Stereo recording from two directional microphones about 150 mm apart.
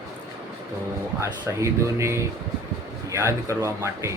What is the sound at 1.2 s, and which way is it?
Speech, 20° right (ahead or behind).